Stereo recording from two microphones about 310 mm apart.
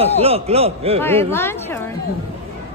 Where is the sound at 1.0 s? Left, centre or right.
Centre.